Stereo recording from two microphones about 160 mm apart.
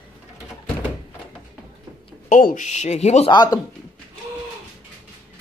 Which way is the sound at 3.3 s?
25° left (ahead or behind).